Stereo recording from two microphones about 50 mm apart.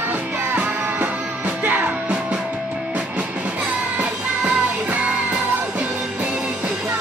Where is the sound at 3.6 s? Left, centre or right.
Right.